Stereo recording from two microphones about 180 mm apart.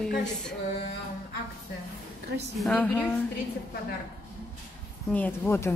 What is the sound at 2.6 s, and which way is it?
Speech, 5° left (ahead or behind).